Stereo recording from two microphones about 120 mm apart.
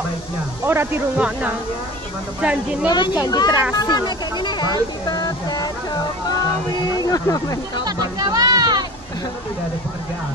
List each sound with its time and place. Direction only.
0.7 s speech: 20° right (ahead or behind)
2.9 s speech: 40° left (ahead or behind)
7.0 s speech: 30° left (ahead or behind)
7.8 s music: 35° right (ahead or behind)